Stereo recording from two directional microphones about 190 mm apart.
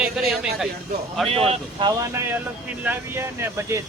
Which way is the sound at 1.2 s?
30° right (ahead or behind).